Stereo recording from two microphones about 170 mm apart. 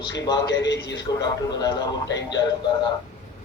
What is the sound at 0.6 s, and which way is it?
Speech, 90° left.